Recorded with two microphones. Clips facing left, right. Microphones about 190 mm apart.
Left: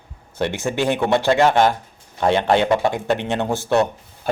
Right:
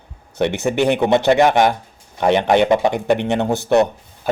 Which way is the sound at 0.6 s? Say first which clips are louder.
Right 4 dB; 20° right (ahead or behind).